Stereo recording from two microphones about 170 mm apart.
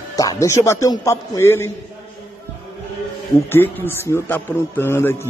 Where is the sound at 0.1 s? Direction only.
20° left (ahead or behind).